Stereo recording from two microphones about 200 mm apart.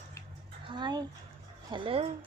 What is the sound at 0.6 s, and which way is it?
Speech, 20° right (ahead or behind).